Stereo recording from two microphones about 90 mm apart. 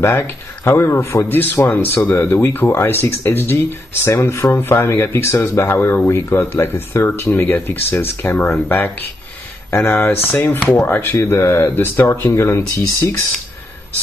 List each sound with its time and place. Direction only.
0.7 s speech: 30° left (ahead or behind)